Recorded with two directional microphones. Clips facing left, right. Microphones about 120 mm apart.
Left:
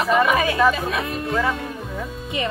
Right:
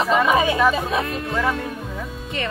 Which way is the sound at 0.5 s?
5° right (ahead or behind).